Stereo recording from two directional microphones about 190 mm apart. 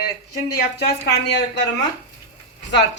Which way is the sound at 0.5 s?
60° left (ahead or behind).